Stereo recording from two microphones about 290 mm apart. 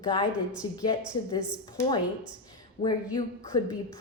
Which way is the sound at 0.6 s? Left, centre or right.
Centre.